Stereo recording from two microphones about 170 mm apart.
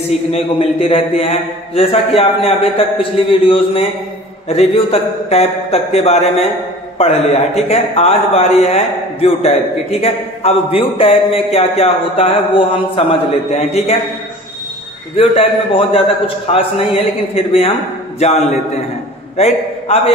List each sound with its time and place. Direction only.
0.3 s a man's voice: 35° left (ahead or behind)
15.1 s a man's voice: 35° left (ahead or behind)